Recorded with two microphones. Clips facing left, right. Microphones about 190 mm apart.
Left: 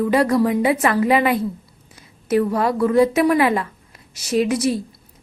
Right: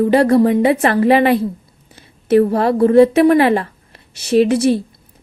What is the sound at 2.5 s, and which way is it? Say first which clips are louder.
A woman's voice: right 5 dB; 30° right (ahead or behind).